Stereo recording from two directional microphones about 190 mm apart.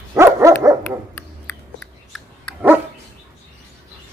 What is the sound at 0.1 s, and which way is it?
Dog, 15° right (ahead or behind).